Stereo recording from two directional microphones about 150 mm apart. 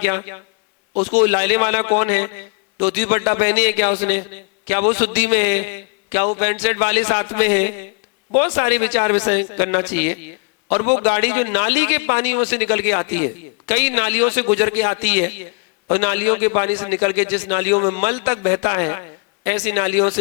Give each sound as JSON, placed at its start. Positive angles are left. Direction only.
{"t": 1.2, "sound": "a man's voice", "side_deg": -20}